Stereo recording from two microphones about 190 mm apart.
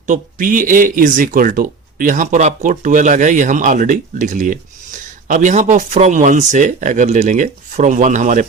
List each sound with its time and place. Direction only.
0.1 s speech: 45° right (ahead or behind)